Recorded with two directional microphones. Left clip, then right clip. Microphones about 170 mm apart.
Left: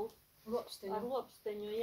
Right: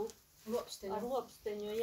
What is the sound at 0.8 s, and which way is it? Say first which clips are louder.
Speech: even; centre (ahead or behind).